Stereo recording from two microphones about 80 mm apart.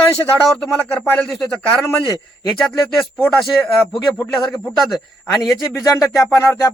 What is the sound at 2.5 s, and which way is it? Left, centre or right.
Speech, centre.